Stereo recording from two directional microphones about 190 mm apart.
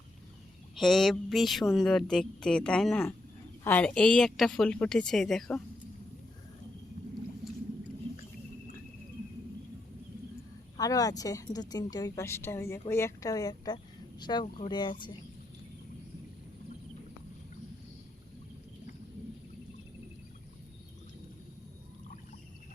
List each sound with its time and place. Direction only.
0.8 s speech: centre (ahead or behind)
10.8 s a woman's voice: 20° left (ahead or behind)